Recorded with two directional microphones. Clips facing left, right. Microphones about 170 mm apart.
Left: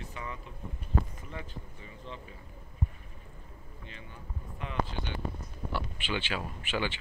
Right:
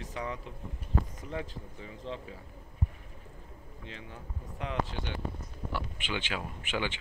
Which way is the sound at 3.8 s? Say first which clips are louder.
Right 4 dB; 90° right.